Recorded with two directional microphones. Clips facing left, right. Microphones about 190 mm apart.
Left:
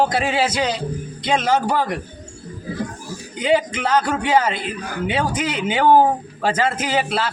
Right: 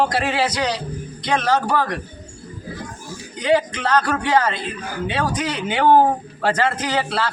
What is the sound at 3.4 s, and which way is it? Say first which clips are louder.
A man's voice: even; 10° left (ahead or behind).